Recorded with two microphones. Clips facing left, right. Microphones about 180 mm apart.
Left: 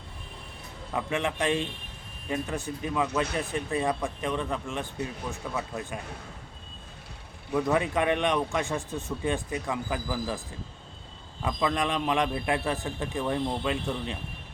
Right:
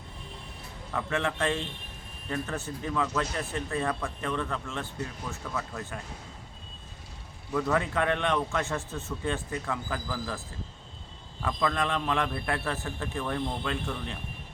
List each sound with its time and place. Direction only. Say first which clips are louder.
0.9 s speech: left 1 dB; 15° left (ahead or behind)
7.5 s speech: left 2 dB; 15° left (ahead or behind)
11.4 s speech: left 1 dB; 15° left (ahead or behind)